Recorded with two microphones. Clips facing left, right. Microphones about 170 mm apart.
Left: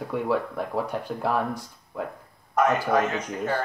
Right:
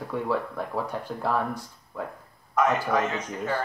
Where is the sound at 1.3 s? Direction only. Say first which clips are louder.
Left 1 dB; 15° left (ahead or behind).